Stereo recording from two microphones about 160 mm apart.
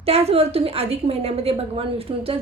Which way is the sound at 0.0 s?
40° right (ahead or behind).